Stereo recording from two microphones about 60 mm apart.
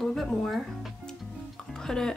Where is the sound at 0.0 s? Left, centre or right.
Centre.